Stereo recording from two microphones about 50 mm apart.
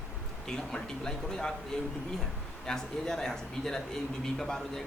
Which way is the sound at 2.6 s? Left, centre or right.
Centre.